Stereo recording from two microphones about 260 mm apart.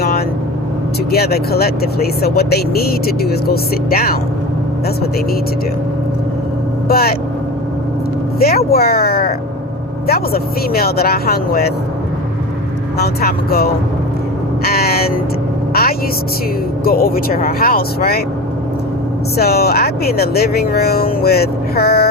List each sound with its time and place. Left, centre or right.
1.1 s speech: left
6.8 s speech: left
8.4 s speech: left
13.0 s speech: left
14.6 s a sound: left
16.8 s speech: left
19.4 s speech: left